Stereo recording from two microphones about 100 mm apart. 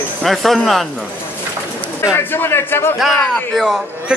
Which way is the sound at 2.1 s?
20° left (ahead or behind).